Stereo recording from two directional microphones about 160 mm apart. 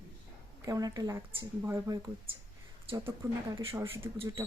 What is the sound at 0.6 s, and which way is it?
A woman's voice, 20° right (ahead or behind).